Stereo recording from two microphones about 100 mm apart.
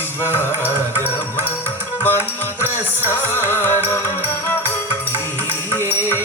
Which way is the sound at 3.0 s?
25° left (ahead or behind).